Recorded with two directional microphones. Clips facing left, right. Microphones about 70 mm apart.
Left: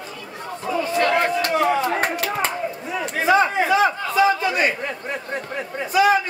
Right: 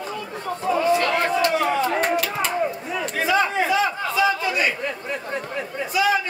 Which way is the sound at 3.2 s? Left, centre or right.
Centre.